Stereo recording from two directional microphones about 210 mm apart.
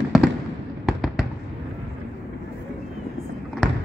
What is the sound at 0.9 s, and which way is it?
Fireworks, centre (ahead or behind).